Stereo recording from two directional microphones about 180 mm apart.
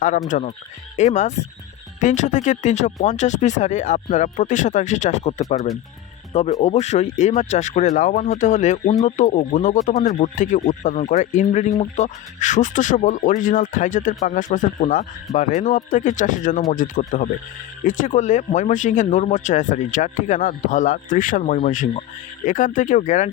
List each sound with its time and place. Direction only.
0.3 s speech: 45° left (ahead or behind)
6.6 s speech: 35° left (ahead or behind)